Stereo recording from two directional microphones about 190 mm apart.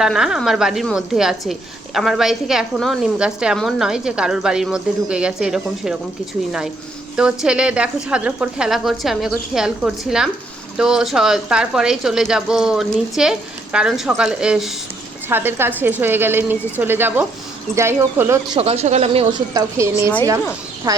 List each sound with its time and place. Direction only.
0.0 s a woman's voice: 5° right (ahead or behind)
7.2 s a woman's voice: 5° right (ahead or behind)
18.5 s speech: 30° right (ahead or behind)
19.5 s speech: 15° right (ahead or behind)